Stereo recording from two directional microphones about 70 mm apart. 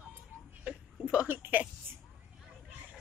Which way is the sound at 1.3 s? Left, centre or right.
Right.